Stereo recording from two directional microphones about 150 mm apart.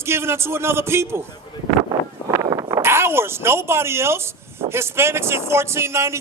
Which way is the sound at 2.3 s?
20° right (ahead or behind).